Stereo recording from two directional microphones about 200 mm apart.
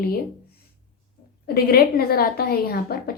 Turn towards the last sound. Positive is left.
turn(degrees=50)  # may be behind; listen again after turning